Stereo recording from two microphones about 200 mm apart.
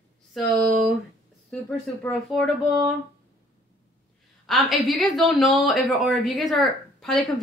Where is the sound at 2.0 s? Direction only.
Centre (ahead or behind).